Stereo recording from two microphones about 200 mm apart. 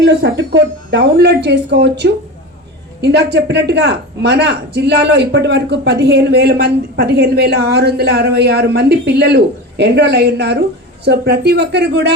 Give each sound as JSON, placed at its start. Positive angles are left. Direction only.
{"t": 0.0, "sound": "speech", "side_deg": -55}